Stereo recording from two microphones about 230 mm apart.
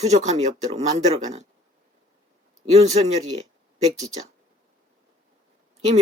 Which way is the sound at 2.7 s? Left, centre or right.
Right.